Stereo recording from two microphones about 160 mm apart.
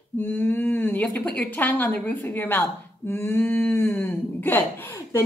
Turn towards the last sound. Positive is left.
turn(degrees=20)  # may be behind; listen again after turning